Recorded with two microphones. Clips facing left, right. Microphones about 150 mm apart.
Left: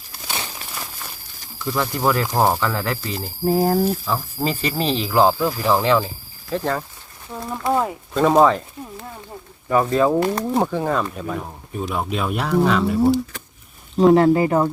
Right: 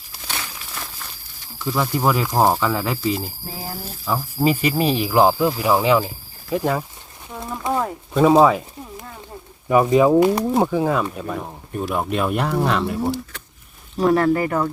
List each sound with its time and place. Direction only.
1.6 s speech: 10° right (ahead or behind)
3.4 s speech: 50° left (ahead or behind)
4.0 s speech: 5° right (ahead or behind)
7.7 s a sound: 5° left (ahead or behind)
8.1 s speech: 5° right (ahead or behind)
14.0 s speech: 20° left (ahead or behind)